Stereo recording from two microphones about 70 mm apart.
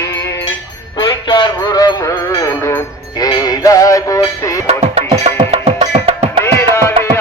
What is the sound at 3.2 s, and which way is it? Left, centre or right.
Synthetic singing, left.